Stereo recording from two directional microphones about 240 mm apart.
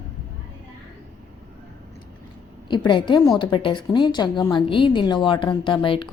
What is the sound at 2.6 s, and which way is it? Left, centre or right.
A woman's voice, centre.